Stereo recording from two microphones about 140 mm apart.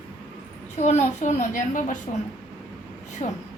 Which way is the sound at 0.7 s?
55° left (ahead or behind).